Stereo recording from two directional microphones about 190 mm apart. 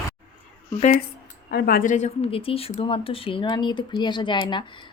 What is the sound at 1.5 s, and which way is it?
Speech, 50° left (ahead or behind).